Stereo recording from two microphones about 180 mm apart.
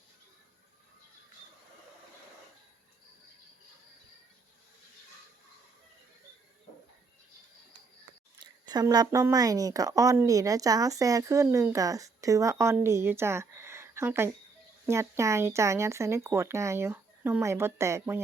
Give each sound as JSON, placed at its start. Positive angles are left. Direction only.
{"t": 8.4, "sound": "speech", "side_deg": -25}